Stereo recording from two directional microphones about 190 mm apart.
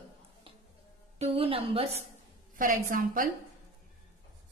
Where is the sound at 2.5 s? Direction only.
45° right (ahead or behind).